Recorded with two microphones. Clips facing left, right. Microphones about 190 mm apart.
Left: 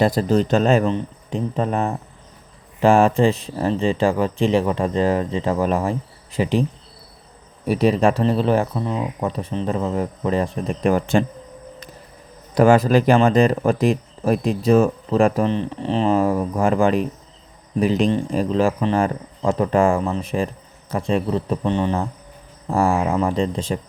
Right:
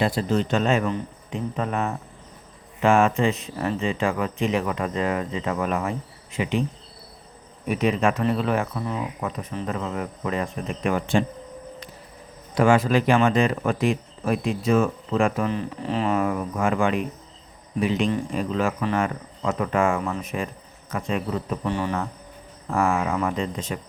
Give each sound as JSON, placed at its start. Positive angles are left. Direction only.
{"t": 0.0, "sound": "speech", "side_deg": 40}
{"t": 12.5, "sound": "speech", "side_deg": 40}